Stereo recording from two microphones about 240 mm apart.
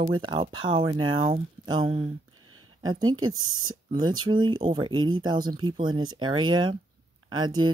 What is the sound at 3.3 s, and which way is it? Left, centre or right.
Speech, right.